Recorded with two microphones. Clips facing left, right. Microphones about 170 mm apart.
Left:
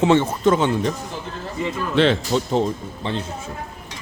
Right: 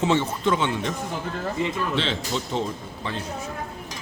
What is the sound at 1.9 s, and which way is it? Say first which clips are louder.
Speech: left 14 dB; 55° left (ahead or behind).